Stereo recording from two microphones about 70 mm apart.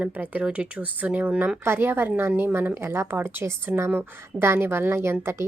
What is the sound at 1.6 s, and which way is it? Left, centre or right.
A woman's voice, right.